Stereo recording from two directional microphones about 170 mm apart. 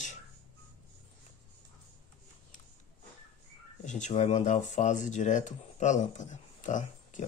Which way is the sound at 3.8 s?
45° left (ahead or behind).